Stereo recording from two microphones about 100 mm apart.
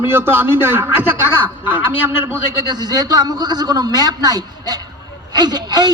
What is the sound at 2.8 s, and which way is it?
A man's voice, 40° right (ahead or behind).